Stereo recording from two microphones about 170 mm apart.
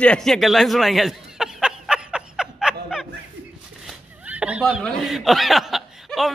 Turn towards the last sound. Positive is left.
turn(degrees=0)  # may be behind; listen again after turning